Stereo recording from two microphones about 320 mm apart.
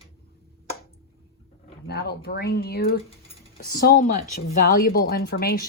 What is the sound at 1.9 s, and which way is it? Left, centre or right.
Speech, left.